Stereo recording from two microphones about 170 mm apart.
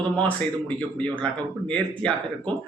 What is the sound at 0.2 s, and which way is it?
A man's voice, 10° left (ahead or behind).